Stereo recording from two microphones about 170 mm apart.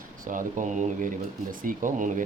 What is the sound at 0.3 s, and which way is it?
Speech, 50° right (ahead or behind).